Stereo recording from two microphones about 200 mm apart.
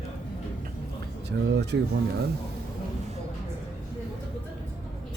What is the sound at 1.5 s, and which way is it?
Speech, 60° right (ahead or behind).